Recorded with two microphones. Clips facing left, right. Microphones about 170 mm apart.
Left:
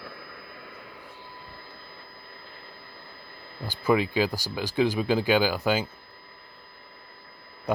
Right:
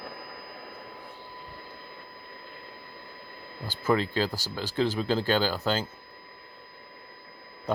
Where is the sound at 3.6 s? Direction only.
15° left (ahead or behind).